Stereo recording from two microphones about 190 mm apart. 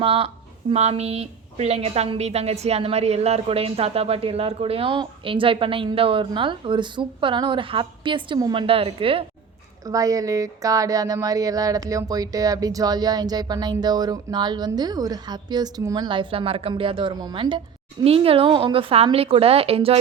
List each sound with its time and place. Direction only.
0.0 s a woman's voice: 30° right (ahead or behind)
9.8 s a woman's voice: 20° right (ahead or behind)